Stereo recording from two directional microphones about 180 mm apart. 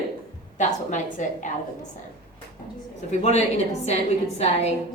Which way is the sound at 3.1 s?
40° left (ahead or behind).